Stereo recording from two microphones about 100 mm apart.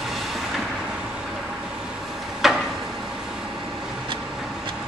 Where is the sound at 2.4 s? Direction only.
Centre (ahead or behind).